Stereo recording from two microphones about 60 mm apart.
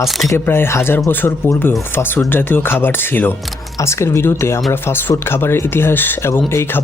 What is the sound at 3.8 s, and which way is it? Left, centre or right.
Speech, left.